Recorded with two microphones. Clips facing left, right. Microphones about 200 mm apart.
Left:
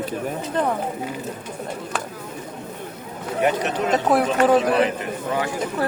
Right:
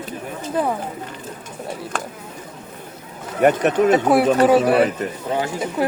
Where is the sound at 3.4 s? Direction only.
50° right (ahead or behind).